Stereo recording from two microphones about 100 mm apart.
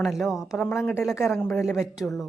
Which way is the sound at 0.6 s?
10° left (ahead or behind).